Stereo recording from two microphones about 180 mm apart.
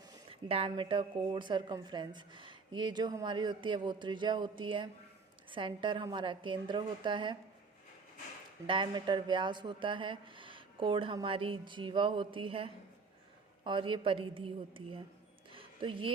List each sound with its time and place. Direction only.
0.3 s speech: 30° right (ahead or behind)
8.6 s speech: 25° right (ahead or behind)
15.5 s a sound: 30° right (ahead or behind)